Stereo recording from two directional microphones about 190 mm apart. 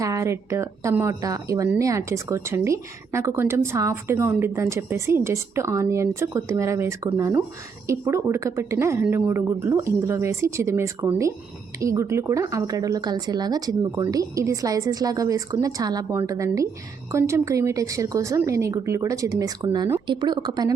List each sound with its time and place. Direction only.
0.0 s speech: 15° right (ahead or behind)